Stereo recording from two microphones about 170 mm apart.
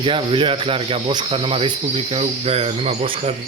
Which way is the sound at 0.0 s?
30° right (ahead or behind).